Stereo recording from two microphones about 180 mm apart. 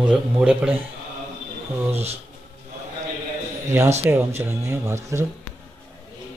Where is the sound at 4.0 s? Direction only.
10° right (ahead or behind).